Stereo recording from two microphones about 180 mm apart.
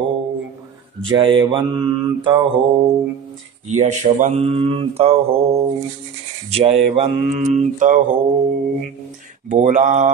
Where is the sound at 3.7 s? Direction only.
40° right (ahead or behind).